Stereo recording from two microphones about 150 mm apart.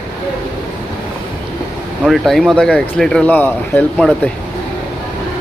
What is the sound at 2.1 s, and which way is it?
Speech, centre (ahead or behind).